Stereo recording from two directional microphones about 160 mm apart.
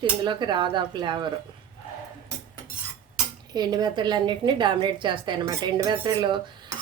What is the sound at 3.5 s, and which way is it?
A woman's voice, 25° right (ahead or behind).